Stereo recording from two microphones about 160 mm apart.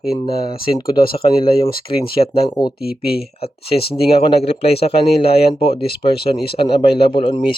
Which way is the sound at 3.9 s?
40° left (ahead or behind).